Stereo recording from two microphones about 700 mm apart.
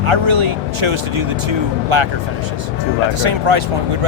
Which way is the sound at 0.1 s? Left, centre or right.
Right.